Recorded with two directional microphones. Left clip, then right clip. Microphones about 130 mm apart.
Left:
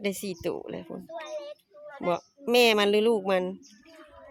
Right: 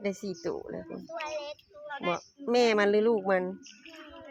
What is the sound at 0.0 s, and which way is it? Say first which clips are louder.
Speech: left 2 dB; 50° left (ahead or behind).